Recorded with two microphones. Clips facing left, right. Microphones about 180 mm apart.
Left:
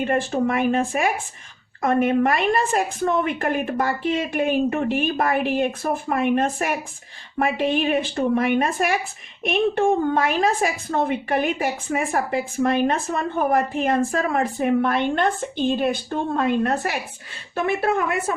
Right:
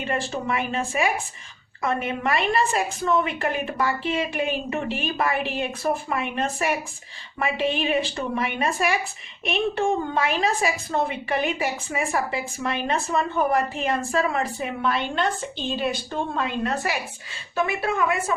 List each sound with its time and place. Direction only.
0.0 s a woman's voice: 50° left (ahead or behind)